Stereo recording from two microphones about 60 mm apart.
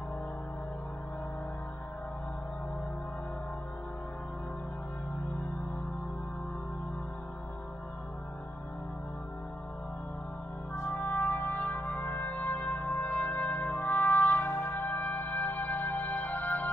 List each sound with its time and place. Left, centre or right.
10.8 s brass instrument: left
14.4 s music: left
14.8 s music: left